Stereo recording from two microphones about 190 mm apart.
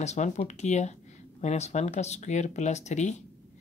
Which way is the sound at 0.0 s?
35° left (ahead or behind).